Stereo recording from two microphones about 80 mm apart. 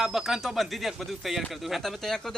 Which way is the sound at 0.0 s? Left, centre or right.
Centre.